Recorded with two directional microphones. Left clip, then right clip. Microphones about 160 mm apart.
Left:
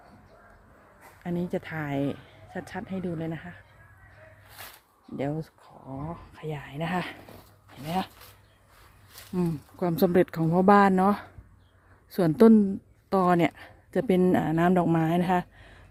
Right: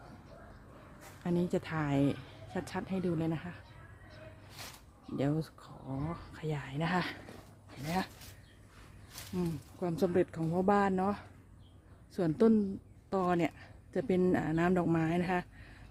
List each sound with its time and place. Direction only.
1.2 s a woman's voice: centre (ahead or behind)
5.1 s a woman's voice: centre (ahead or behind)
7.9 s speech: 15° left (ahead or behind)
9.4 s a woman's voice: 50° left (ahead or behind)
14.2 s speech: 35° left (ahead or behind)